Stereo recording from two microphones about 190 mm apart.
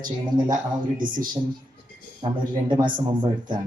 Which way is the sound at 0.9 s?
45° right (ahead or behind).